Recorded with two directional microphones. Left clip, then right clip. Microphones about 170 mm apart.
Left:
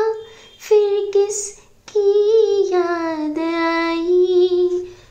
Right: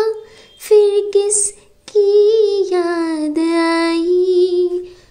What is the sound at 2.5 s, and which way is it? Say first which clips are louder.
Child singing: right 1 dB; 60° right (ahead or behind).